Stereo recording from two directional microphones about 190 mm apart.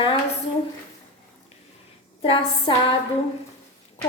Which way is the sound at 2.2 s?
30° left (ahead or behind).